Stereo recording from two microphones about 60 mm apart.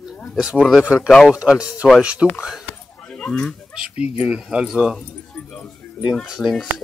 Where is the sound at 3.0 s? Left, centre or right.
Left.